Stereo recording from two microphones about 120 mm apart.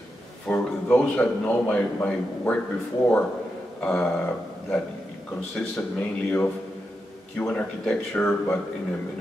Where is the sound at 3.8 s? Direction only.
5° left (ahead or behind).